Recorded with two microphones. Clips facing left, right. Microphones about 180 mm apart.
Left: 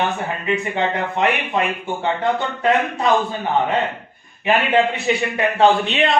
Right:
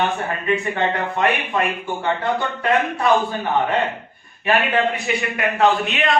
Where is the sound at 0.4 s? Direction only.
20° left (ahead or behind).